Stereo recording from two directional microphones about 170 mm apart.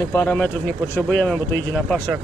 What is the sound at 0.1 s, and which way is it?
Speech, 10° left (ahead or behind).